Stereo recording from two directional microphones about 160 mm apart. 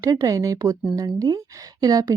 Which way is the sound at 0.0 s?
20° right (ahead or behind).